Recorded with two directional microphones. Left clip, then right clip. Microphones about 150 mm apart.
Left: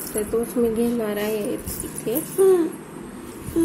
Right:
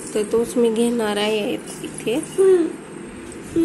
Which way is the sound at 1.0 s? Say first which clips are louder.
Right 4 dB; 5° right (ahead or behind).